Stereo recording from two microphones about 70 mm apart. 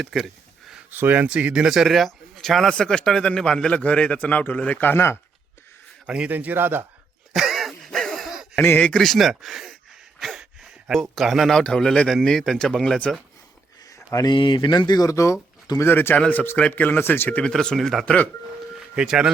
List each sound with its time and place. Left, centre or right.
0.0 s a man's voice: centre
0.9 s speech: right
1.3 s a man's voice: centre; by 5.1 s left
6.1 s speech: centre
6.3 s a man's voice: right
7.3 s a sound: centre
9.0 s a man's voice: centre
10.2 s a sound: centre
11.1 s a man's voice: centre
14.3 s speech: left
15.1 s speech: left
15.8 s a man's voice: left
17.4 s a man's voice: centre
18.9 s speech: centre